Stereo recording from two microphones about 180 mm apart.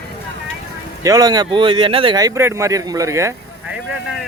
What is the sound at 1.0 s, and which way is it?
Speech, 20° right (ahead or behind).